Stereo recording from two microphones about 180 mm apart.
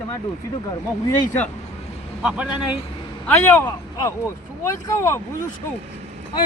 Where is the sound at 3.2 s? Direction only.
10° left (ahead or behind).